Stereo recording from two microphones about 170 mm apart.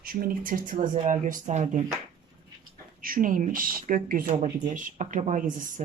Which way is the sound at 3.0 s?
55° right (ahead or behind).